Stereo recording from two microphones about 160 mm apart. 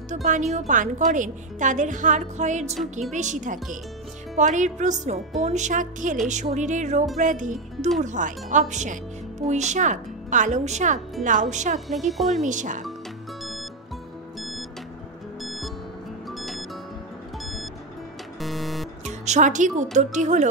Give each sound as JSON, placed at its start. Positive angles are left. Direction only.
{"t": 0.1, "sound": "a woman's voice", "side_deg": -50}
{"t": 11.9, "sound": "speech", "side_deg": 0}
{"t": 12.4, "sound": "a woman's voice", "side_deg": -50}
{"t": 13.4, "sound": "music", "side_deg": 0}
{"t": 15.4, "sound": "music", "side_deg": 0}
{"t": 18.4, "sound": "music", "side_deg": 0}
{"t": 19.0, "sound": "a woman's voice", "side_deg": -45}